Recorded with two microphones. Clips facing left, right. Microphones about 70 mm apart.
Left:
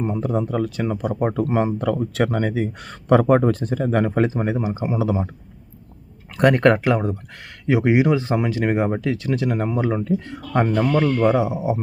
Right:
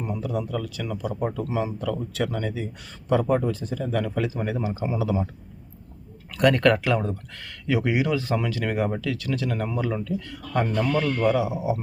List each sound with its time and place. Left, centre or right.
0.0 s speech: left
6.3 s speech: left